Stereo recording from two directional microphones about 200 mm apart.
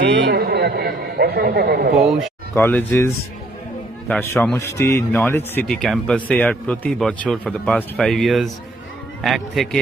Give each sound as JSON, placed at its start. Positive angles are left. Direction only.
{"t": 0.0, "sound": "a man's voice", "side_deg": -60}
{"t": 2.0, "sound": "speech", "side_deg": 0}
{"t": 2.6, "sound": "speech", "side_deg": 10}
{"t": 4.1, "sound": "speech", "side_deg": 10}